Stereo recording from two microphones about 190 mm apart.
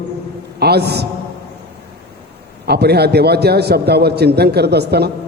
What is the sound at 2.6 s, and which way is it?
A man's voice, 60° right (ahead or behind).